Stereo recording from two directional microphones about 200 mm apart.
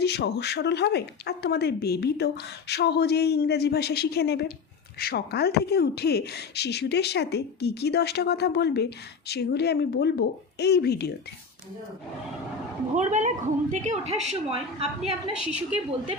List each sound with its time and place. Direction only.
0.0 s speech: 55° left (ahead or behind)
13.0 s a woman's voice: 35° right (ahead or behind)